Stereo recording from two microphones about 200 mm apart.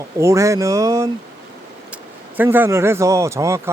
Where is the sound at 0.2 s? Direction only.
15° right (ahead or behind).